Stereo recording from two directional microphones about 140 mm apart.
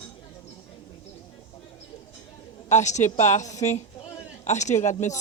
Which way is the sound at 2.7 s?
55° left (ahead or behind).